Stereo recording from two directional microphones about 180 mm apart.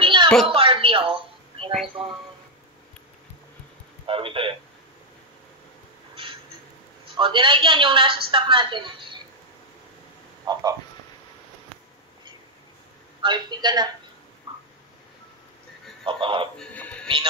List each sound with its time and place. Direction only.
0.0 s a sound: 25° right (ahead or behind)
0.5 s doorbell: 30° right (ahead or behind)
4.0 s a man's voice: 30° right (ahead or behind)
7.2 s a woman's voice: 25° right (ahead or behind)
10.4 s speech: 20° right (ahead or behind)
13.2 s a woman's voice: 25° right (ahead or behind)
16.1 s a woman's voice: 30° right (ahead or behind)
16.5 s speech: 5° left (ahead or behind)